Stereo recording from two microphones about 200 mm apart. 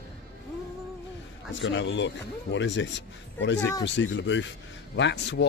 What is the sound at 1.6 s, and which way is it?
Speech, 65° left (ahead or behind).